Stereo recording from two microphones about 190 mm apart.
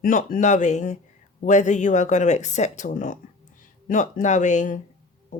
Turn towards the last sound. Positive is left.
turn(degrees=40)  # may be behind; listen again after turning